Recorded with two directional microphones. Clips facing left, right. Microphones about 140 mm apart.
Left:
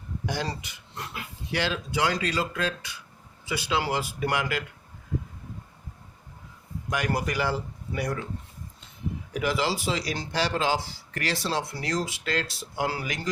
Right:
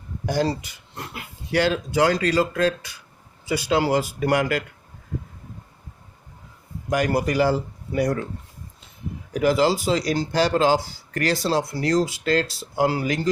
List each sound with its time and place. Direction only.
0.3 s speech: 40° right (ahead or behind)
6.9 s speech: 35° right (ahead or behind)
9.3 s speech: 40° right (ahead or behind)